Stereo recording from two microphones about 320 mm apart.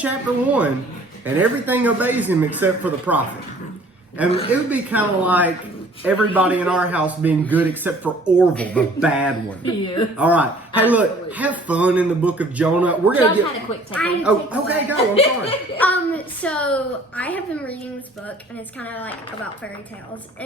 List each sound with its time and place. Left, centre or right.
0.0 s a man's voice: centre
15.1 s speech: centre
15.8 s a man's voice: centre
18.8 s a man's voice: centre